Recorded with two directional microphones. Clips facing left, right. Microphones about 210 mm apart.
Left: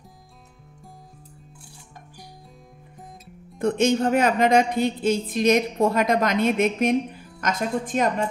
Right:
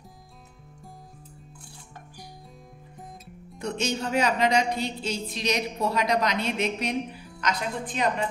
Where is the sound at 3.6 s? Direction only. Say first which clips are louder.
Left 9 dB; 50° left (ahead or behind).